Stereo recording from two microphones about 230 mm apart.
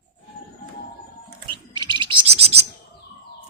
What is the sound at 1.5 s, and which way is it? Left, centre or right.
Bird, right.